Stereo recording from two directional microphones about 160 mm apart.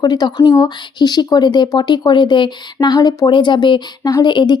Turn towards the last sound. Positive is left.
turn(degrees=30)  # may be behind; listen again after turning